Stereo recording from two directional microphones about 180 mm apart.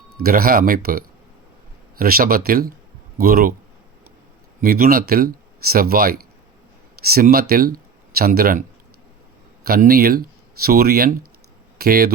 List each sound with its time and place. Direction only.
0.2 s speech: 55° right (ahead or behind)
4.6 s speech: 55° right (ahead or behind)
9.6 s speech: 55° right (ahead or behind)